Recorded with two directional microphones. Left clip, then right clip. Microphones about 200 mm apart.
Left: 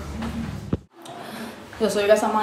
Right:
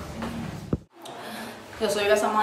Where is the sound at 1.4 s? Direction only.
Centre (ahead or behind).